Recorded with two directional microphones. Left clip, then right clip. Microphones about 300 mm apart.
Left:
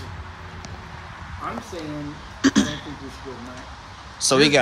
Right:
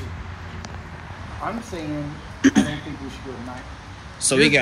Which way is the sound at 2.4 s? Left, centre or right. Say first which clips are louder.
Right 1 dB; centre.